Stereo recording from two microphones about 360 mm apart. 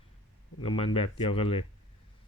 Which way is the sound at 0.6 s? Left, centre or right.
Centre.